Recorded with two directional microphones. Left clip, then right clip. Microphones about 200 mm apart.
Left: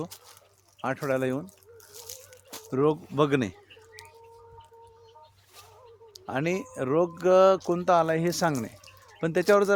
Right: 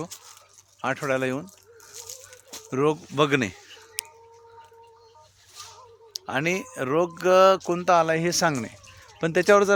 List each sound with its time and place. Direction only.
0.8 s speech: 20° right (ahead or behind)
2.6 s speech: 15° right (ahead or behind)
6.1 s speech: 15° right (ahead or behind)
9.2 s speech: 25° right (ahead or behind)